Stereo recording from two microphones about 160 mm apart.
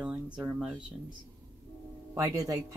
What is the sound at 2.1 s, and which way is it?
Speech, 20° right (ahead or behind).